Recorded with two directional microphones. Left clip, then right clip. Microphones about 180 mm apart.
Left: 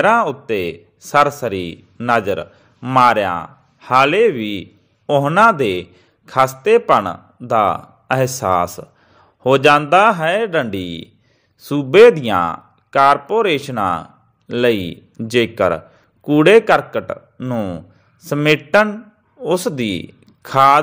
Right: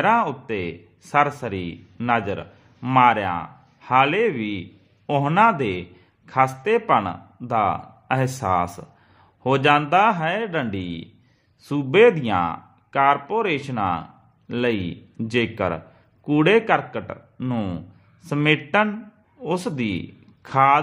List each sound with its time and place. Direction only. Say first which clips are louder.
0.0 s speech: left 5 dB; 15° left (ahead or behind)
17.4 s speech: left 4 dB; 5° left (ahead or behind)
18.2 s speech: left 5 dB; 20° left (ahead or behind)